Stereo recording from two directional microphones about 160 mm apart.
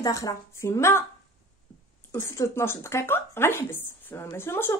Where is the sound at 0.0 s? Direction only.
20° left (ahead or behind).